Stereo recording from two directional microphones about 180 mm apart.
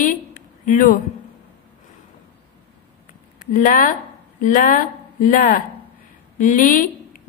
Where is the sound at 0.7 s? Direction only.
50° left (ahead or behind).